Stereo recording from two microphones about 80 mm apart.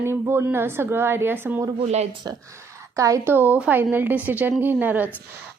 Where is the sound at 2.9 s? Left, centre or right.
Right.